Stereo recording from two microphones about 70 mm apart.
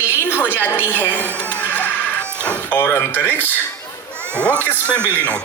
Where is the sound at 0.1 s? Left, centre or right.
Left.